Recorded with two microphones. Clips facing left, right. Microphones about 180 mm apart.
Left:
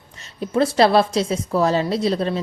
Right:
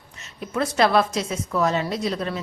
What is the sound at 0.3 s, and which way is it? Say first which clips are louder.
A woman's voice: left 5 dB; 30° left (ahead or behind).